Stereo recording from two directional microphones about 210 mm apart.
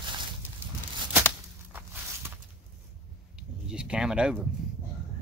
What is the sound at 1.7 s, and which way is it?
Walk, 10° right (ahead or behind).